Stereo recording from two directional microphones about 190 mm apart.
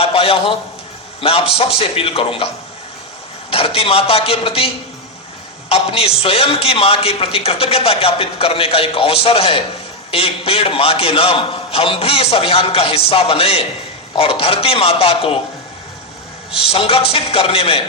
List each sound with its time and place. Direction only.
0.0 s a sound: 30° left (ahead or behind)
1.2 s a man's voice: 30° left (ahead or behind)
3.5 s a man's voice: 30° left (ahead or behind)
16.6 s speech: 30° left (ahead or behind)